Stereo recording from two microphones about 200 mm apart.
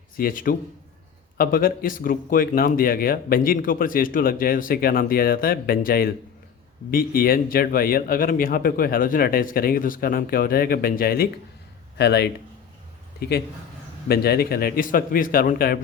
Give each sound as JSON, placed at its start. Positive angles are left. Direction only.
{"t": 0.2, "sound": "a man's voice", "side_deg": 45}